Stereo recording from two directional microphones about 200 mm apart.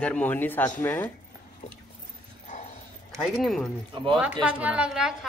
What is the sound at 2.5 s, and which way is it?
Dog, 40° left (ahead or behind).